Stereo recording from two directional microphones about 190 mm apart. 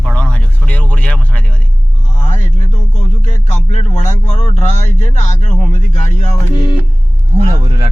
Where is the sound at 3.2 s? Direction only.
35° left (ahead or behind).